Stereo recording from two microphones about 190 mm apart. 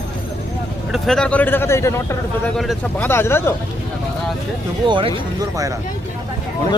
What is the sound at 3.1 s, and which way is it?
Speech, 15° left (ahead or behind).